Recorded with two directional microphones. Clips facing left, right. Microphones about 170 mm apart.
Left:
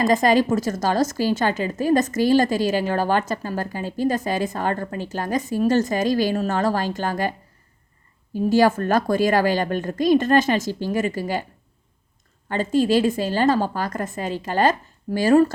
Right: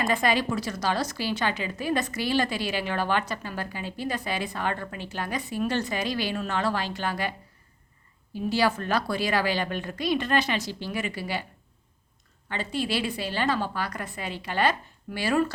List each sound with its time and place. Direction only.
0.0 s a woman's voice: 40° left (ahead or behind)
8.4 s a woman's voice: 45° left (ahead or behind)
12.5 s a woman's voice: 45° left (ahead or behind)